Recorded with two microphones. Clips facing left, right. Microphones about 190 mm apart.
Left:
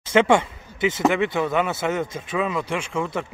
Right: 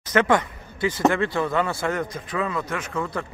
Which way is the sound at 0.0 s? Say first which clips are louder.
Left 3 dB; 25° left (ahead or behind).